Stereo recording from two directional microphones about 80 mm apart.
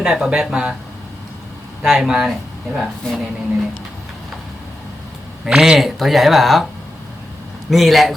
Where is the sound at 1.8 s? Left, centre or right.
Centre.